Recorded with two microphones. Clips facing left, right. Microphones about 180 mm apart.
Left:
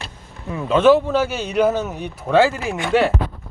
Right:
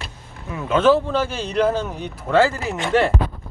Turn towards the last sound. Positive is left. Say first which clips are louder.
# left 1 dB
turn(degrees=10)  # may be behind; listen again after turning